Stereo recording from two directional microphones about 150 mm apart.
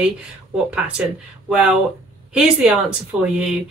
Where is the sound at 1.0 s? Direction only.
5° right (ahead or behind).